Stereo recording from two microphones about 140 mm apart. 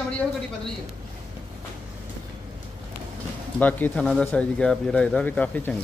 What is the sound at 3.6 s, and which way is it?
Speech, 15° left (ahead or behind).